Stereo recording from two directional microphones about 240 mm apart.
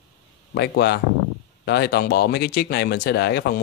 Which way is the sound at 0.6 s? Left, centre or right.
Left.